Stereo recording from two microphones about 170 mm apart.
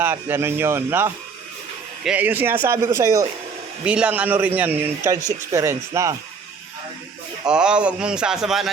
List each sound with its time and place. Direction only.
0.0 s a man's voice: 10° right (ahead or behind)
3.8 s a man's voice: 5° right (ahead or behind)
7.4 s a man's voice: 5° right (ahead or behind)